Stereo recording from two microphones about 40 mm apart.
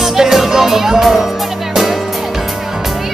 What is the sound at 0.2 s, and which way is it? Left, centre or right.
Speech, centre.